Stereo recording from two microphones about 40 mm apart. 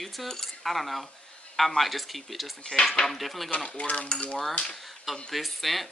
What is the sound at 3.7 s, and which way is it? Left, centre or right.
Cutlery, left.